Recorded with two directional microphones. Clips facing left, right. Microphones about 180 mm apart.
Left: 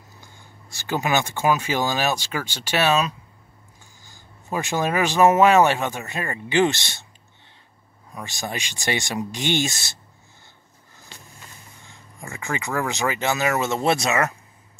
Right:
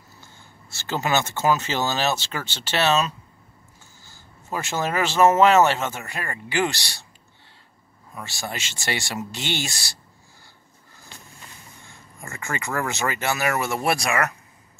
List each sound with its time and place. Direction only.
0.2 s speech: 15° left (ahead or behind)
8.1 s speech: 15° left (ahead or behind)
11.9 s speech: 15° left (ahead or behind)